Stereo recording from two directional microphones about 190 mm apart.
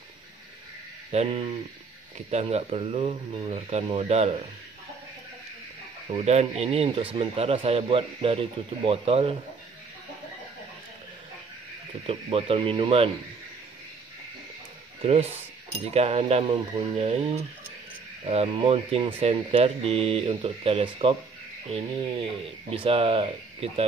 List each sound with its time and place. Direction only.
1.1 s speech: 35° right (ahead or behind)
6.1 s speech: 35° right (ahead or behind)
12.1 s speech: 30° right (ahead or behind)
15.0 s speech: 30° right (ahead or behind)
18.2 s speech: 30° right (ahead or behind)
22.2 s speech: 30° right (ahead or behind)